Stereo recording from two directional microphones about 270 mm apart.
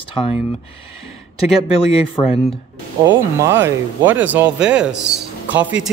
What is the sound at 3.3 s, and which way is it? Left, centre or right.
Speech, centre.